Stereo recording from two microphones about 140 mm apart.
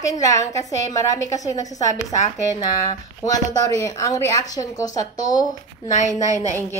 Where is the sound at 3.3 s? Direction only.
25° left (ahead or behind).